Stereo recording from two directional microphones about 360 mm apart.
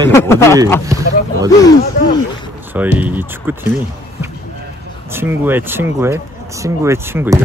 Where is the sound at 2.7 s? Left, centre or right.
Centre.